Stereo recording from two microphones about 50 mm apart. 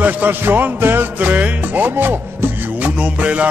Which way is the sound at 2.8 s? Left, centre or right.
Right.